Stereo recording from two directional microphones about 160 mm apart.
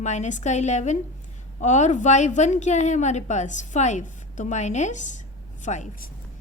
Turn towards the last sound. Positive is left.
turn(degrees=50)  # may be behind; listen again after turning